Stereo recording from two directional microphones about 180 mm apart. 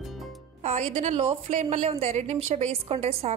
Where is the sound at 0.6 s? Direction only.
40° right (ahead or behind).